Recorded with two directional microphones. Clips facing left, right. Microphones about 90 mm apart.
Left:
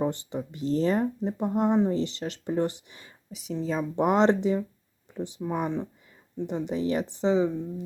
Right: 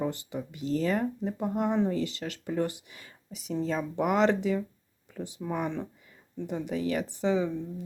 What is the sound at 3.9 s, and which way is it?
Speech, 30° left (ahead or behind).